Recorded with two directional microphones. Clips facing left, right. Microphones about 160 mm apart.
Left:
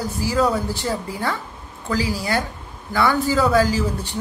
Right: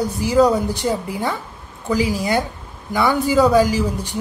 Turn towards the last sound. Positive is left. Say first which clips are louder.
# right 2 dB
turn(degrees=-15)  # may be behind; listen again after turning